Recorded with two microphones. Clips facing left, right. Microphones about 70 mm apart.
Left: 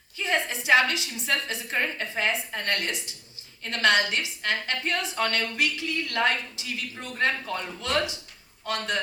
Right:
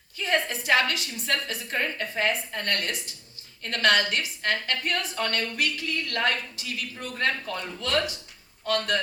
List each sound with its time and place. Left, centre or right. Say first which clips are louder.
0.2 s a woman's voice: right 1 dB; left